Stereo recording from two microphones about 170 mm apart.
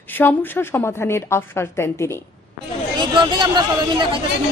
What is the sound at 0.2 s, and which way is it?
A woman's voice, 15° left (ahead or behind).